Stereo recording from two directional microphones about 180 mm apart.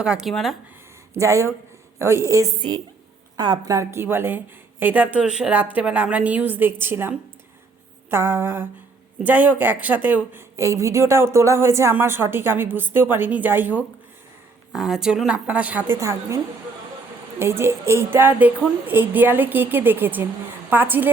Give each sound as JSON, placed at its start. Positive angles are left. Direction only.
{"t": 0.0, "sound": "speech", "side_deg": -5}
{"t": 1.1, "sound": "a woman's voice", "side_deg": -15}
{"t": 17.4, "sound": "a woman's voice", "side_deg": -15}